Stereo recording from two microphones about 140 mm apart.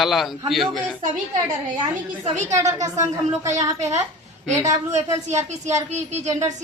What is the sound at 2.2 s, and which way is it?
Speech, 55° right (ahead or behind).